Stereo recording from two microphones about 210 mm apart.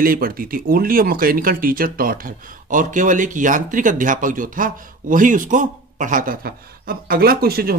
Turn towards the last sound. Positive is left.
turn(degrees=-45)  # may be behind; listen again after turning